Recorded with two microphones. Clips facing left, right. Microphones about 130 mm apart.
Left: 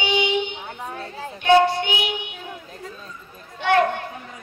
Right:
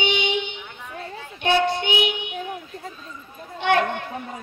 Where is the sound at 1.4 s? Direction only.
20° right (ahead or behind).